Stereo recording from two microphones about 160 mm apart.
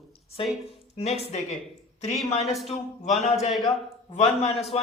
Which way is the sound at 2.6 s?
45° left (ahead or behind).